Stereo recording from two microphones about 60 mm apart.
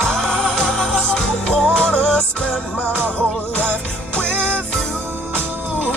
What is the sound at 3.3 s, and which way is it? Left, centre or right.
Music, left.